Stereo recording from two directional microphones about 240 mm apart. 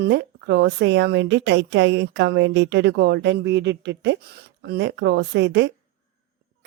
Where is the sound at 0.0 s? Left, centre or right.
Right.